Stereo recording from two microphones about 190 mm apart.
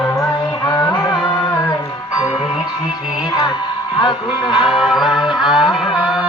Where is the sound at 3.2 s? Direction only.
20° left (ahead or behind).